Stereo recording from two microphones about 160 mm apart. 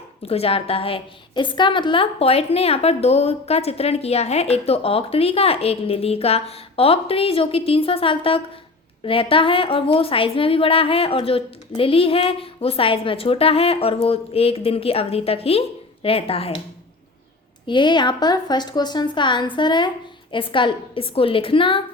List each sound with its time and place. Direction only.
0.3 s a woman's voice: 40° left (ahead or behind)
17.7 s a woman's voice: 30° left (ahead or behind)